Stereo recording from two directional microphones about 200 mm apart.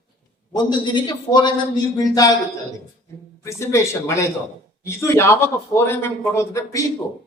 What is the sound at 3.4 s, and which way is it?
A man's voice, 15° left (ahead or behind).